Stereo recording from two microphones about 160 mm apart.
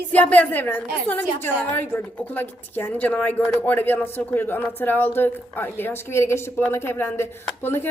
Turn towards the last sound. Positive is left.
turn(degrees=15)  # may be behind; listen again after turning